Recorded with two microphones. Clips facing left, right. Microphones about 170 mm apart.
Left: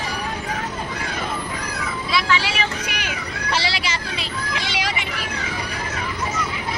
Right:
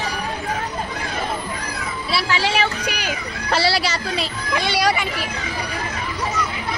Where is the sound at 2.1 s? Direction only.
35° right (ahead or behind).